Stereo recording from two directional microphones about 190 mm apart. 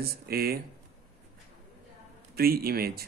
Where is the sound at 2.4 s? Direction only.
50° right (ahead or behind).